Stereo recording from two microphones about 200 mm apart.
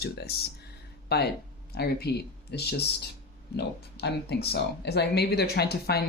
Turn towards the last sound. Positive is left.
turn(degrees=55)  # may be behind; listen again after turning